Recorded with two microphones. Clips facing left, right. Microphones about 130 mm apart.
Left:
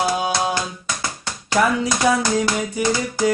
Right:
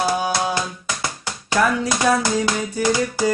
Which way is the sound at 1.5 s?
15° left (ahead or behind).